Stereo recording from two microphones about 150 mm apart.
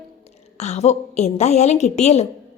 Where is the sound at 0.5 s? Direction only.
45° left (ahead or behind).